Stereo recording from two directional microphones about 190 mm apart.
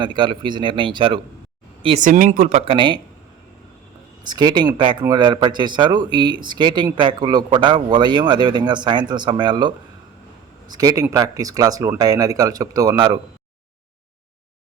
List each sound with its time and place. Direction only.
0.0 s speech: 25° right (ahead or behind)
2.0 s speech: 45° right (ahead or behind); by 3.0 s 25° right (ahead or behind)
4.3 s speech: 20° right (ahead or behind)